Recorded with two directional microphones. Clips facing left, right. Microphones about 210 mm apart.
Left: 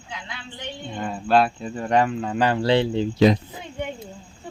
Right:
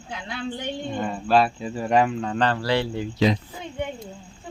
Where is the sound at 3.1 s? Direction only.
50° left (ahead or behind).